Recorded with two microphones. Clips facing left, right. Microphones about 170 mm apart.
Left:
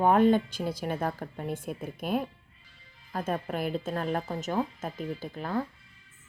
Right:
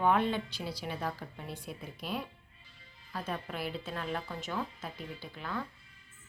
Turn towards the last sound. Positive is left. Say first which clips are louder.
# left 7 dB
turn(degrees=40)  # may be behind; listen again after turning